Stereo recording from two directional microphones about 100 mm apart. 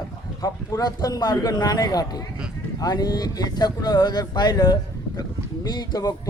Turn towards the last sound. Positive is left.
turn(degrees=40)  # may be behind; listen again after turning